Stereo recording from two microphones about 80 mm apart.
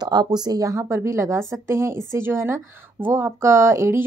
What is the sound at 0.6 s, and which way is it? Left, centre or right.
A woman's voice, right.